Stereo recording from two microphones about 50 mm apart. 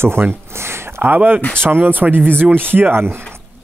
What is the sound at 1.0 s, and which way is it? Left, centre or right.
Speech, right.